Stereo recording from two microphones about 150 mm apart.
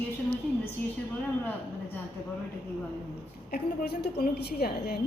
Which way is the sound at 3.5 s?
85° left.